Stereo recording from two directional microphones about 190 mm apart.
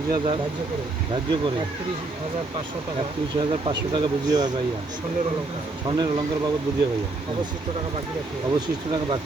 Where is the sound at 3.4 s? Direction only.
25° right (ahead or behind).